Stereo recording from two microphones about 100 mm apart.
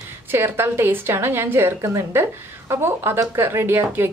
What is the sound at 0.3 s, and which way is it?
A woman's voice, 25° right (ahead or behind).